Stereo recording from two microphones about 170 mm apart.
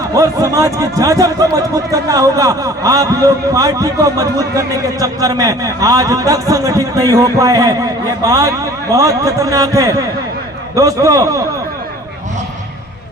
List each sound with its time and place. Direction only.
0.1 s a man's voice: 20° right (ahead or behind)